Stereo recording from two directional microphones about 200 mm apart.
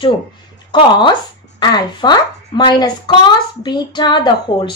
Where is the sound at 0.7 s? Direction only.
25° left (ahead or behind).